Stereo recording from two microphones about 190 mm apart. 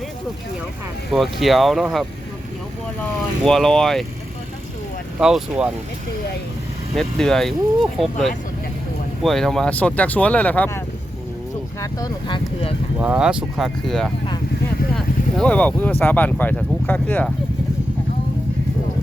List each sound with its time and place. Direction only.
1.1 s speech: centre (ahead or behind)
3.4 s speech: 5° left (ahead or behind)
5.2 s speech: 5° right (ahead or behind)
6.9 s speech: centre (ahead or behind); by 12.4 s 20° left (ahead or behind)
13.0 s speech: 5° right (ahead or behind)